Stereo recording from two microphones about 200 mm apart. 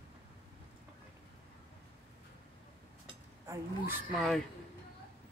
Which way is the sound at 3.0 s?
15° right (ahead or behind).